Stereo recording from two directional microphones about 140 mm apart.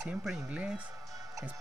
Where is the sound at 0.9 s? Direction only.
25° right (ahead or behind).